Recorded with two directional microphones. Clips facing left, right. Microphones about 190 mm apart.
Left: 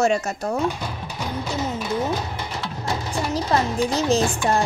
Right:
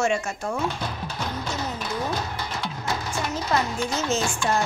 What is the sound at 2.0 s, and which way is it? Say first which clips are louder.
Speech: left 3 dB; 20° left (ahead or behind).